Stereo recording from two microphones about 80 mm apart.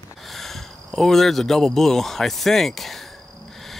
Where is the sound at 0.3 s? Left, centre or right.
Centre.